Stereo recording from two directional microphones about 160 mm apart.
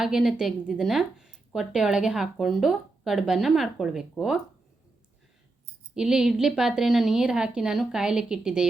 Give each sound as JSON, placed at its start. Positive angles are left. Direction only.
{"t": 0.0, "sound": "speech", "side_deg": 0}
{"t": 5.9, "sound": "speech", "side_deg": -5}